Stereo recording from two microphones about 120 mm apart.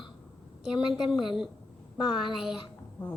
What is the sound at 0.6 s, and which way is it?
A woman's voice, 5° right (ahead or behind).